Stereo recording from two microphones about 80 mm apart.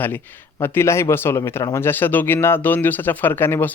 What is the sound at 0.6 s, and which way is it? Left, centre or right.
Speech, left.